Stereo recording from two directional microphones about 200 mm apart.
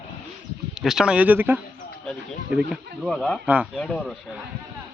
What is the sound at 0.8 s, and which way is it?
Speech, centre (ahead or behind).